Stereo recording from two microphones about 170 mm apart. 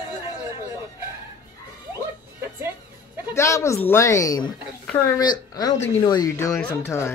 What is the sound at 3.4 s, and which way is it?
Speech, 15° left (ahead or behind).